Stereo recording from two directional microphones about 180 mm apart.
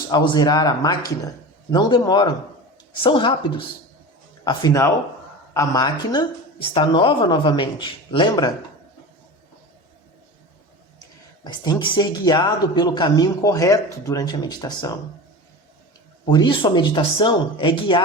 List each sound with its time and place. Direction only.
0.1 s speech: 25° left (ahead or behind)
4.4 s speech: 20° left (ahead or behind)
11.0 s speech: 25° left (ahead or behind)
16.3 s speech: 25° left (ahead or behind)